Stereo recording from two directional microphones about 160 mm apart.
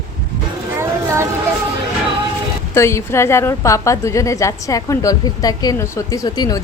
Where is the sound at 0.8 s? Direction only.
15° right (ahead or behind).